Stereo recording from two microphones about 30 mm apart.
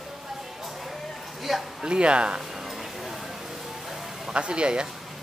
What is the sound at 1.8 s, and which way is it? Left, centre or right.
Speech, right.